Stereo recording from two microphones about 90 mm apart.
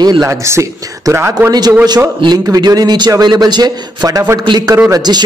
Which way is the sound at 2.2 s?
50° right (ahead or behind).